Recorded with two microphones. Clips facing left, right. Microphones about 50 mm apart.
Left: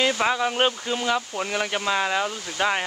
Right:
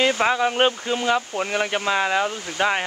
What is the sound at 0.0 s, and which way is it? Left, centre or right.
Speech, centre.